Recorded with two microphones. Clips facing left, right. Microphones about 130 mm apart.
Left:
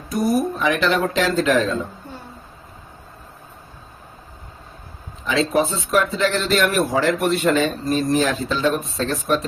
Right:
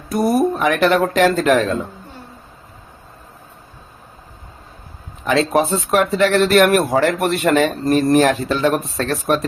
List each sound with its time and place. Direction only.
0.1 s speech: 55° right (ahead or behind)
5.2 s speech: 55° right (ahead or behind)